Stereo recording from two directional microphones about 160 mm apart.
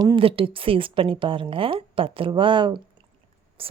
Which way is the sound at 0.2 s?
35° right (ahead or behind).